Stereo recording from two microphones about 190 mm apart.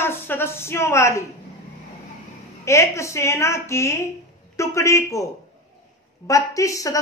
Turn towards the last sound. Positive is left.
turn(degrees=15)  # may be behind; listen again after turning